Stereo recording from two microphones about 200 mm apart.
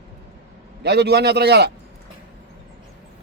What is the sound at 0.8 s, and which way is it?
Speech, 55° right (ahead or behind).